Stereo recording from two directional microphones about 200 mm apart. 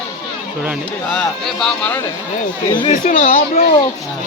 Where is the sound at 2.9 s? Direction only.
40° left (ahead or behind).